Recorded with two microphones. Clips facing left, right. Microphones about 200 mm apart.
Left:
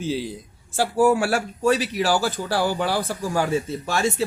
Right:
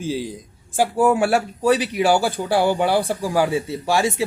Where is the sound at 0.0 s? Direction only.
45° right (ahead or behind).